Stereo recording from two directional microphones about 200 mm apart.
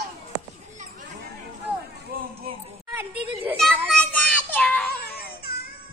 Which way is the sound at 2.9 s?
10° right (ahead or behind).